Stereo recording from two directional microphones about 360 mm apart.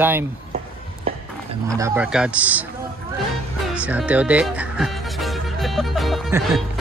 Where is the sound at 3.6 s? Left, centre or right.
Centre.